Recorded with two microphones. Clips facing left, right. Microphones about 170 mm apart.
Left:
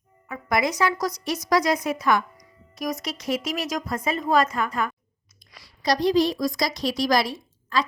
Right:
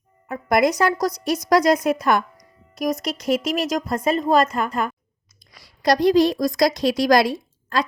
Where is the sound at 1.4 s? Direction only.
65° right (ahead or behind).